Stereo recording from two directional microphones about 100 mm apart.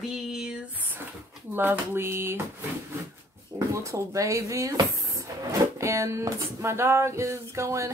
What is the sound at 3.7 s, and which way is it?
A woman's voice, 30° right (ahead or behind).